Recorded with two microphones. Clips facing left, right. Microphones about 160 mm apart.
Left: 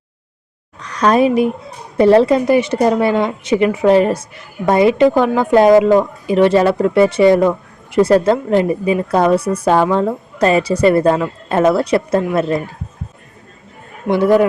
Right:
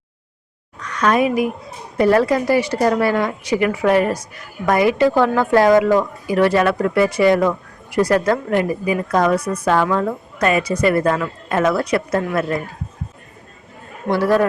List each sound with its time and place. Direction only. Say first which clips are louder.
0.8 s a woman's voice: left 4 dB; 35° left (ahead or behind)
14.1 s a woman's voice: left 4 dB; 20° left (ahead or behind)